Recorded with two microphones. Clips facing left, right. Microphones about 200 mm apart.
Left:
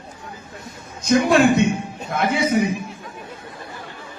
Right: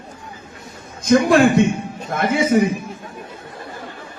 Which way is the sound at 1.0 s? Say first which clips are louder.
Right 2 dB; 55° right (ahead or behind).